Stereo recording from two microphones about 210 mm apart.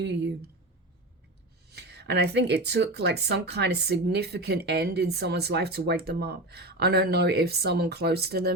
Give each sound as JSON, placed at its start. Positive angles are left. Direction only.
{"t": 1.7, "sound": "speech", "side_deg": -50}